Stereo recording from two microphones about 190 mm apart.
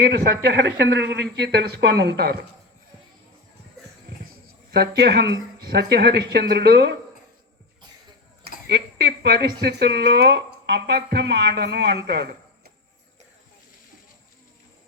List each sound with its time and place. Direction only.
0.0 s a woman's voice: 60° right (ahead or behind)
4.7 s a woman's voice: 60° right (ahead or behind)
9.2 s a woman's voice: 60° right (ahead or behind)